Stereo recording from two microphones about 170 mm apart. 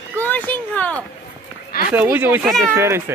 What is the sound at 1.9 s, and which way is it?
Speech, 10° right (ahead or behind).